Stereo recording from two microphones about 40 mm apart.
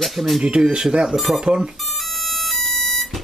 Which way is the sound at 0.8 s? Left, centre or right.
Centre.